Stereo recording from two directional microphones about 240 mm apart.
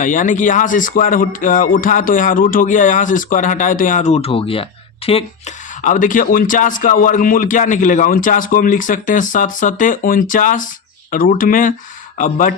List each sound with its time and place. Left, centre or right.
0.0 s a man's voice: left